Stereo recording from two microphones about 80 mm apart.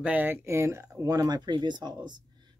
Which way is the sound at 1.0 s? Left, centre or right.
Right.